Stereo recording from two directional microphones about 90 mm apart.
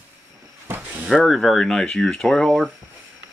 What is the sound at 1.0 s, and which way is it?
Speech, centre (ahead or behind).